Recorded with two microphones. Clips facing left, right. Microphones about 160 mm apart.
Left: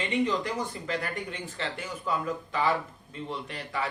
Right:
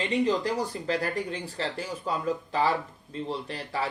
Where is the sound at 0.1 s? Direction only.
35° right (ahead or behind).